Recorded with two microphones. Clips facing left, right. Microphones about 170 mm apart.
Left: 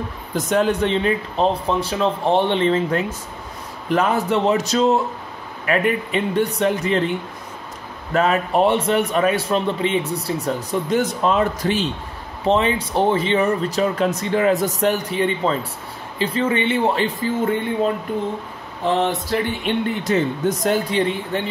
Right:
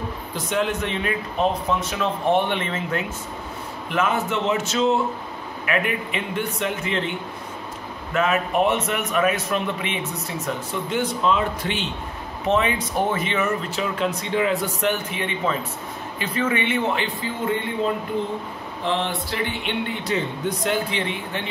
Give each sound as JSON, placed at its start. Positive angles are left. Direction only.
{"t": 0.5, "sound": "a man's voice", "side_deg": 35}
{"t": 8.1, "sound": "a man's voice", "side_deg": 35}
{"t": 18.9, "sound": "speech", "side_deg": 45}